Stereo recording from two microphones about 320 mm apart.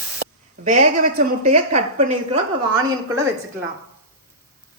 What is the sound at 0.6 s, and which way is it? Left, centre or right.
A woman's voice, right.